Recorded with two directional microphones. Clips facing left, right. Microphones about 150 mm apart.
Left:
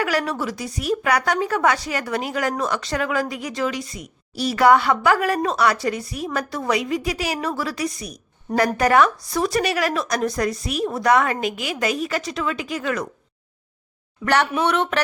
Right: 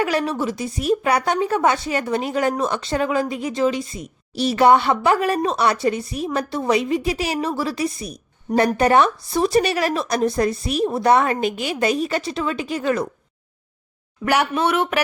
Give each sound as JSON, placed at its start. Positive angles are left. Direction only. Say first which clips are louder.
{"t": 0.0, "sound": "a woman's voice", "louder": "right 2 dB", "side_deg": -25}
{"t": 14.7, "sound": "speech", "louder": "right 1 dB", "side_deg": -10}